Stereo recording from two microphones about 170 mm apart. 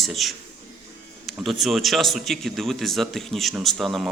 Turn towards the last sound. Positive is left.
turn(degrees=0)  # may be behind; listen again after turning